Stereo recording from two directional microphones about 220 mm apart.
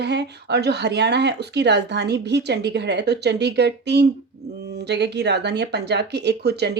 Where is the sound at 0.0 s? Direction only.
50° right (ahead or behind).